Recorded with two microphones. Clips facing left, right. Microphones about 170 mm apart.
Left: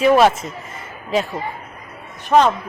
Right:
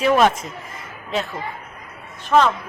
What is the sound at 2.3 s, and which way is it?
Speech, 20° left (ahead or behind).